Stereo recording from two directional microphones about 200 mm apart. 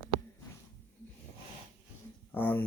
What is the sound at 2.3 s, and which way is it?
Speech, 10° left (ahead or behind).